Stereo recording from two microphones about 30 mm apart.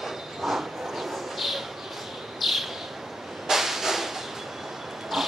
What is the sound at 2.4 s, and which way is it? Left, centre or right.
Bird, centre.